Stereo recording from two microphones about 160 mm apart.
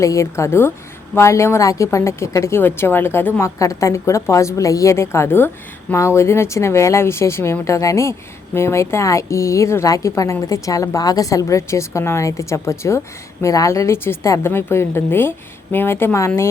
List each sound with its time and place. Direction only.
0.0 s a woman's voice: 20° left (ahead or behind)